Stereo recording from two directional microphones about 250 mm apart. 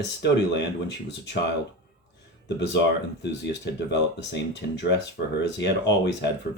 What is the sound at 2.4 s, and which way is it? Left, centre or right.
Speech, left.